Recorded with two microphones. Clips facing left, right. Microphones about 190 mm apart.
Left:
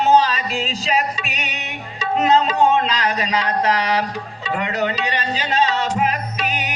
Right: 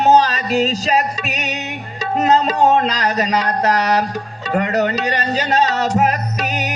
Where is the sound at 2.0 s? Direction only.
40° right (ahead or behind).